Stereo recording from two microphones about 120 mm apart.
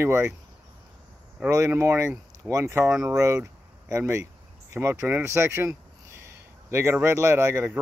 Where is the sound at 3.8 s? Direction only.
25° right (ahead or behind).